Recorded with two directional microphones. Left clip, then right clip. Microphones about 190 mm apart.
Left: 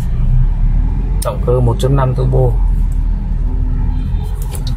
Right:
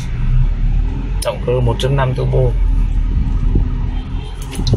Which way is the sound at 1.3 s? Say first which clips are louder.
Left 1 dB; 30° left (ahead or behind).